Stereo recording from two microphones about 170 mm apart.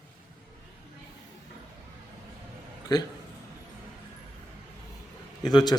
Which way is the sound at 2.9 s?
25° left (ahead or behind).